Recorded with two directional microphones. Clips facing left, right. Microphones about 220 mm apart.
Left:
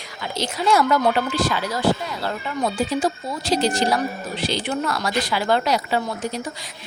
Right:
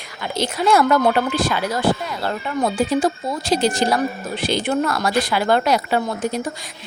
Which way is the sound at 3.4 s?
50° right (ahead or behind).